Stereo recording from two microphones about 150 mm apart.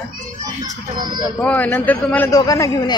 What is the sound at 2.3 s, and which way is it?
Speech, 25° left (ahead or behind).